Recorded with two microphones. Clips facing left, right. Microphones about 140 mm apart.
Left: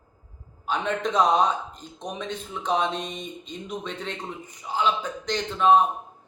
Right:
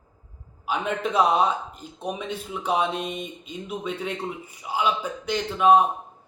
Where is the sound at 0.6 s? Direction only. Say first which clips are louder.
Even; 10° right (ahead or behind).